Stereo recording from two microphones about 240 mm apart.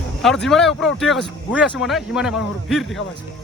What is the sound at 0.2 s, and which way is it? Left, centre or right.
Speech, centre.